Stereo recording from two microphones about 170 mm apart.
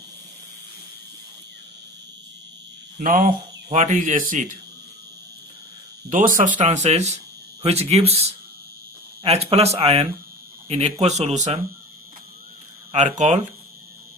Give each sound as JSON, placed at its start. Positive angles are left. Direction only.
{"t": 3.0, "sound": "speech", "side_deg": -55}
{"t": 3.2, "sound": "speech", "side_deg": -40}
{"t": 6.1, "sound": "speech", "side_deg": -50}
{"t": 12.9, "sound": "speech", "side_deg": -45}